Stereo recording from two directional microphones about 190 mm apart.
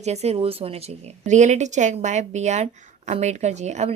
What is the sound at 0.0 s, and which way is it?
A woman's voice, 35° right (ahead or behind).